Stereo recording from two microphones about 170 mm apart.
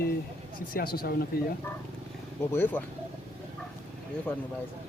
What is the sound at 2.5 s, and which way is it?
Speech, 10° left (ahead or behind).